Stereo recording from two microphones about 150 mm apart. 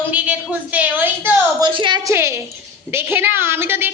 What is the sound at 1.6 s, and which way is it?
A woman's voice, 30° right (ahead or behind).